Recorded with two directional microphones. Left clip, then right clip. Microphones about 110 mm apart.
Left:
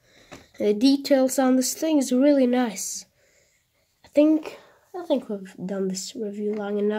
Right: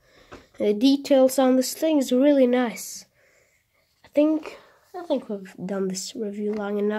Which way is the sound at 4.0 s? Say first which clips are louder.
Left 2 dB; 25° left (ahead or behind).